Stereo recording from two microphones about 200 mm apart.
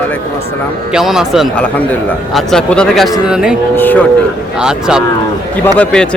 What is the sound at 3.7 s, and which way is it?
Cattle, 10° left (ahead or behind).